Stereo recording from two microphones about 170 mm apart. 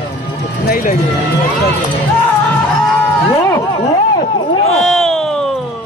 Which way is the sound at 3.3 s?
20° left (ahead or behind).